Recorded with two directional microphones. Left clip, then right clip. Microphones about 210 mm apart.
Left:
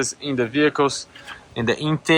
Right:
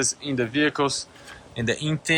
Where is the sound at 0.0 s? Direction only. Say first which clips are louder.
Left 2 dB; 10° right (ahead or behind).